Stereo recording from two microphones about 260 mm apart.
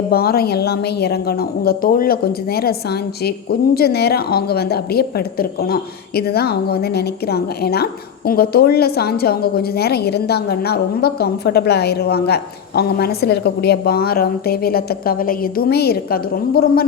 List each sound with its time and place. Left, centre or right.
0.1 s a woman's voice: left